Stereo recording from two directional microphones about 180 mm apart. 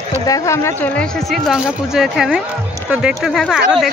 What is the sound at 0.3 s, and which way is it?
Speech, 15° left (ahead or behind).